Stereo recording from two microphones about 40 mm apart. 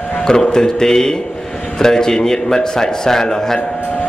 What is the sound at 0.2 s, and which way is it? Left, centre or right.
A man's voice, centre.